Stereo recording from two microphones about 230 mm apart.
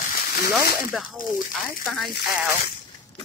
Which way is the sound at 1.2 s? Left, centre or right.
Left.